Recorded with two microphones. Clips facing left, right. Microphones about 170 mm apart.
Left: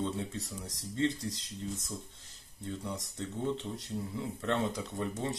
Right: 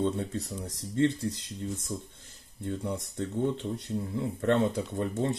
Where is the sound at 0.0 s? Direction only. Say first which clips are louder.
Right 6 dB; 45° right (ahead or behind).